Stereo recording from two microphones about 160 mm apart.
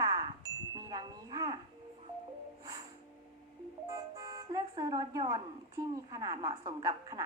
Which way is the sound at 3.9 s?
25° right (ahead or behind).